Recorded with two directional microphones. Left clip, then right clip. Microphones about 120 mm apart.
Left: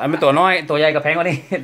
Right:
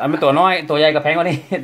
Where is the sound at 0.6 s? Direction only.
10° right (ahead or behind).